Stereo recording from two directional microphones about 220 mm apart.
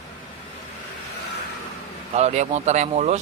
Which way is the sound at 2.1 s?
30° right (ahead or behind).